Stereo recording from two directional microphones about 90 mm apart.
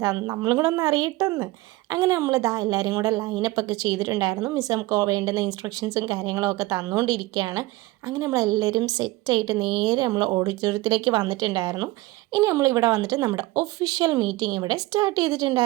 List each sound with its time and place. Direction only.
0.0 s a woman's voice: 40° right (ahead or behind); by 1.5 s 55° right (ahead or behind)
1.9 s a woman's voice: 40° right (ahead or behind)
6.3 s a woman's voice: 35° right (ahead or behind)
12.3 s a woman's voice: 35° right (ahead or behind)